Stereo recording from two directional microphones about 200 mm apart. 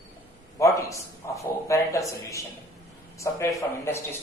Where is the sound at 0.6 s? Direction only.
15° left (ahead or behind).